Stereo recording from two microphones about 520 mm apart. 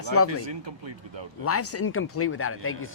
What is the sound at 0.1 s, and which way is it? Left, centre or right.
Speech, left.